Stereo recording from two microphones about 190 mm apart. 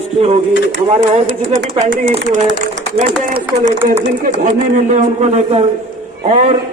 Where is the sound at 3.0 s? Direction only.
45° right (ahead or behind).